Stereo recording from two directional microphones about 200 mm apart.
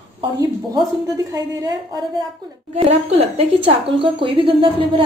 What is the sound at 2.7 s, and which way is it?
A woman's voice, 30° right (ahead or behind).